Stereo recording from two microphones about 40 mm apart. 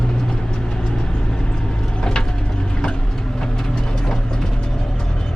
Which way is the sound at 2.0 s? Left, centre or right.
Centre.